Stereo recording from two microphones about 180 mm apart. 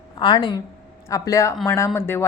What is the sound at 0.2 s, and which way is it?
Speech, 25° left (ahead or behind).